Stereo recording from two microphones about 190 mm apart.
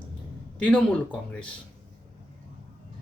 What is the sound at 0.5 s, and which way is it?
Speech, 5° left (ahead or behind).